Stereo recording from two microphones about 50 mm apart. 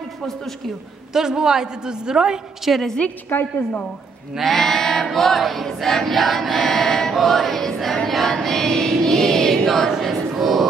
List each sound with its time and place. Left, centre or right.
1.1 s a man's voice: centre
2.7 s a woman's voice: centre
3.3 s a woman's voice: left
4.4 s choir: centre